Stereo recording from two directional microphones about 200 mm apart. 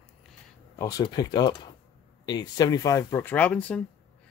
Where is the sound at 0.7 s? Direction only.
20° left (ahead or behind).